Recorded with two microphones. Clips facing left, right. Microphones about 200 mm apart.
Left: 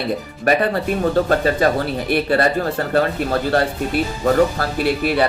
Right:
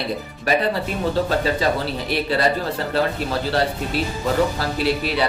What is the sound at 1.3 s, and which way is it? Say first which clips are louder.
Speech: left 4 dB; 50° left (ahead or behind).